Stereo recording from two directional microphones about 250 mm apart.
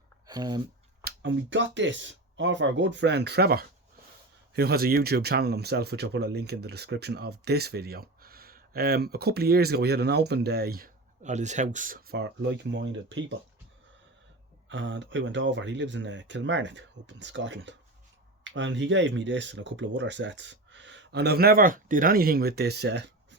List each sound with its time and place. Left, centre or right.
0.3 s speech: centre
1.0 s speech: right
14.7 s speech: right